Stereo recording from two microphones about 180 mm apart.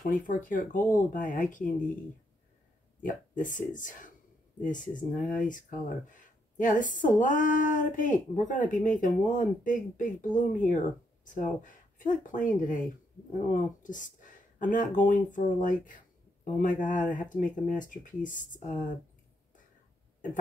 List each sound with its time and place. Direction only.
0.0 s speech: 45° left (ahead or behind)
3.0 s speech: 45° left (ahead or behind)